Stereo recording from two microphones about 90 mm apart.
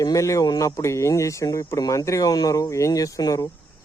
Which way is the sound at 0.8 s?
35° left (ahead or behind).